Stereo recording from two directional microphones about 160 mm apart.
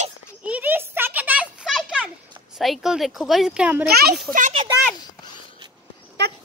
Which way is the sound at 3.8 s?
80° right.